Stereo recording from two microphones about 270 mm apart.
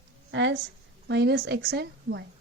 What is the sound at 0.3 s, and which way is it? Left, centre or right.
A woman's voice, right.